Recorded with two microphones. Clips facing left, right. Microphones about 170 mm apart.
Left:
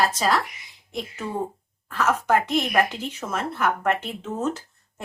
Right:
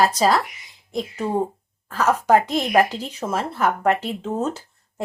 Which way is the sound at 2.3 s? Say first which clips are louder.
Right 4 dB; 35° right (ahead or behind).